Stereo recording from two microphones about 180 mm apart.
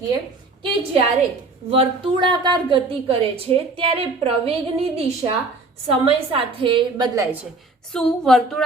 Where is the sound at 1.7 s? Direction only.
25° right (ahead or behind).